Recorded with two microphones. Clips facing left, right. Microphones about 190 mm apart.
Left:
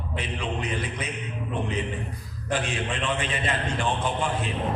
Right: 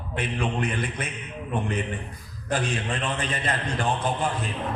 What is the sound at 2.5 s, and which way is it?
A man's voice, 40° right (ahead or behind).